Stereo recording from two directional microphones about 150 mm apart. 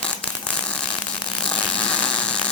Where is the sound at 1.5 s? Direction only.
5° left (ahead or behind).